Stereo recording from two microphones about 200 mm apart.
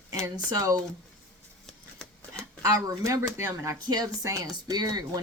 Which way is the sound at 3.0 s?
15° right (ahead or behind).